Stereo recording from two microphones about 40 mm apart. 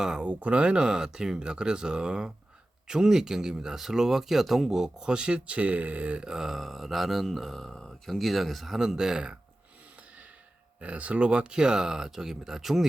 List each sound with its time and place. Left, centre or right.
0.0 s speech: centre
0.3 s speech: right; by 4.9 s centre
4.9 s speech: right
5.5 s speech: right
6.2 s speech: centre
10.8 s speech: right; by 12.8 s centre